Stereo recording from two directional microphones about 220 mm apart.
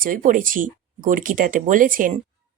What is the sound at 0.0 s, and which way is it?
Speech, 40° right (ahead or behind).